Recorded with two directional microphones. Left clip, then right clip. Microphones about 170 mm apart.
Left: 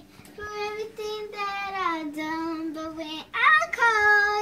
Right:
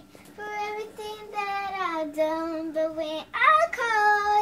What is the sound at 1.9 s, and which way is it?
Child singing, 20° right (ahead or behind).